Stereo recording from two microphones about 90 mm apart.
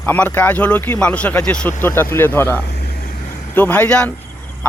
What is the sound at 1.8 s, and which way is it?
Speech, 25° left (ahead or behind).